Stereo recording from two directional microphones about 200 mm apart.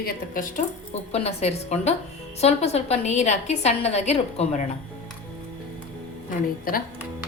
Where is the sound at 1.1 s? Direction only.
30° left (ahead or behind).